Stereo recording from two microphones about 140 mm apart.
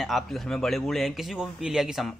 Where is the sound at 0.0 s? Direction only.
Centre (ahead or behind).